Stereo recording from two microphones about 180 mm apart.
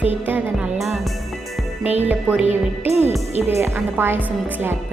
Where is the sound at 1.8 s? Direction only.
10° right (ahead or behind).